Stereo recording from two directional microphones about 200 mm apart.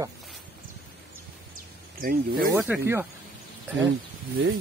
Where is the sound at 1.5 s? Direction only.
50° right (ahead or behind).